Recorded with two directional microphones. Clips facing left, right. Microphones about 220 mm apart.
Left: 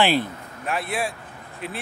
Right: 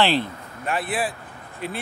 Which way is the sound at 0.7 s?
Centre (ahead or behind).